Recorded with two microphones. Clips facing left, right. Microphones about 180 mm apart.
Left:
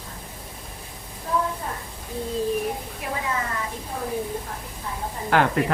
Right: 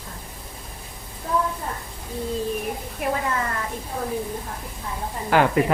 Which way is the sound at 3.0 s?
60° right (ahead or behind).